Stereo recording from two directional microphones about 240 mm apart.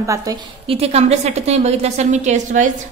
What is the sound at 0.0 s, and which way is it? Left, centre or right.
A woman's voice, centre.